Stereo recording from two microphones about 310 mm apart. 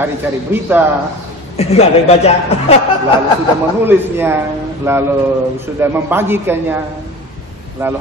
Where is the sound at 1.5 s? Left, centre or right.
Centre.